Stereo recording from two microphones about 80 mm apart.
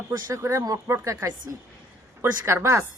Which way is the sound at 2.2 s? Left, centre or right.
Right.